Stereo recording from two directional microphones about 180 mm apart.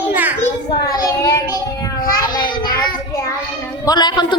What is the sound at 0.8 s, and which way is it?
Speech, 20° left (ahead or behind).